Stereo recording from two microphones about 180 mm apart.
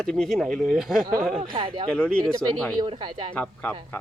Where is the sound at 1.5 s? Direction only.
30° right (ahead or behind).